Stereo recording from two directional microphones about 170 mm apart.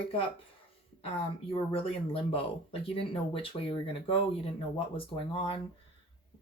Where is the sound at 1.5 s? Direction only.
35° left (ahead or behind).